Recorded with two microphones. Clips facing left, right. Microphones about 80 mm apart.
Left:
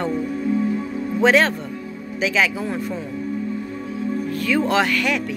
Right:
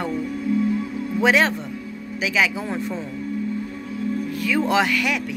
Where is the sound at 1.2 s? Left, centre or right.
Centre.